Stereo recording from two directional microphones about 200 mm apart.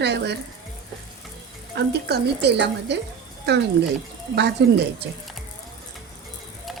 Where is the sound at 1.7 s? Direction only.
55° right (ahead or behind).